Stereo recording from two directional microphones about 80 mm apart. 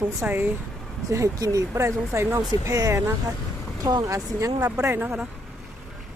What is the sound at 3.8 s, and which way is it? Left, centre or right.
Speech, right.